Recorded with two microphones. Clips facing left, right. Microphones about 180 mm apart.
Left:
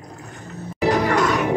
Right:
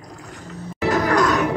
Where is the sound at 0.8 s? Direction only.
10° left (ahead or behind).